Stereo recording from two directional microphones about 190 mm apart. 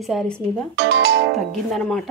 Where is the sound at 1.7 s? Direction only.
5° left (ahead or behind).